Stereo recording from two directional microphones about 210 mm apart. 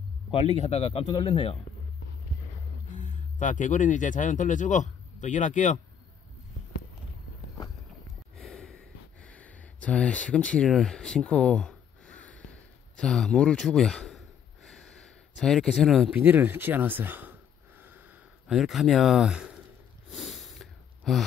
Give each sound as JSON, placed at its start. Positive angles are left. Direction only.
{"t": 0.3, "sound": "speech", "side_deg": 30}
{"t": 3.0, "sound": "speech", "side_deg": 35}
{"t": 8.4, "sound": "a sound", "side_deg": 0}
{"t": 18.5, "sound": "speech", "side_deg": 0}
{"t": 20.1, "sound": "sniff", "side_deg": 0}